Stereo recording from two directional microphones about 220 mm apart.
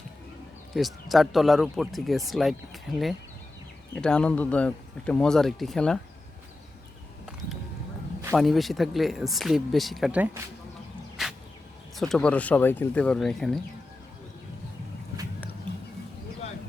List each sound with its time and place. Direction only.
0.7 s speech: centre (ahead or behind)
8.2 s speech: 5° right (ahead or behind)
11.2 s a sound: centre (ahead or behind)
11.9 s speech: centre (ahead or behind)